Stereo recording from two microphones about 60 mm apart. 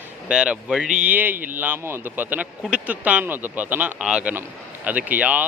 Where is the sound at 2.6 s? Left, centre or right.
Centre.